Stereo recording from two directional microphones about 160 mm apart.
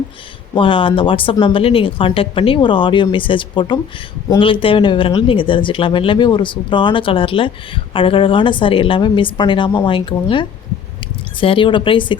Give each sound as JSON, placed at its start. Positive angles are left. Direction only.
{"t": 0.5, "sound": "speech", "side_deg": 35}